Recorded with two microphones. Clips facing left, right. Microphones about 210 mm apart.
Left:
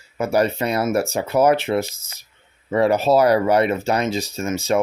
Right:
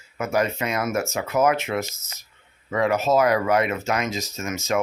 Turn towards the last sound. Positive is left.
turn(degrees=30)  # may be behind; listen again after turning